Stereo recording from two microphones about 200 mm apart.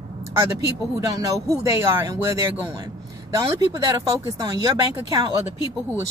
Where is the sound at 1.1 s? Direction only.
15° right (ahead or behind).